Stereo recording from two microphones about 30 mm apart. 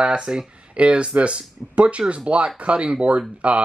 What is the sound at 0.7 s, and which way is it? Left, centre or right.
Speech, right.